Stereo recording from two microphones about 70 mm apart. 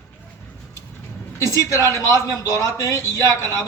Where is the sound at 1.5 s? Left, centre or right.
Left.